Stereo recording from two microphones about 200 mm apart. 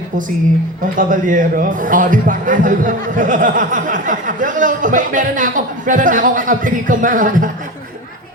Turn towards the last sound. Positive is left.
turn(degrees=-40)  # may be behind; listen again after turning